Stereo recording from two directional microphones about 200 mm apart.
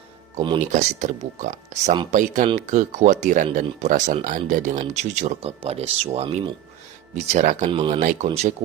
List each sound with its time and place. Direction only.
0.6 s speech: 35° right (ahead or behind)